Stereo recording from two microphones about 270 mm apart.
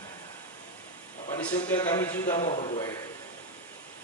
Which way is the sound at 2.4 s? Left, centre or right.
Centre.